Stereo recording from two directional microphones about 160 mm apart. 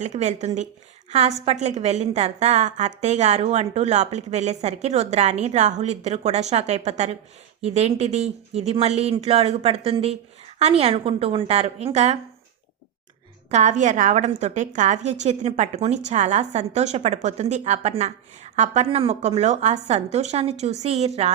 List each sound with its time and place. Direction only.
0.0 s a woman's voice: 45° right (ahead or behind)
13.5 s a woman's voice: 45° right (ahead or behind)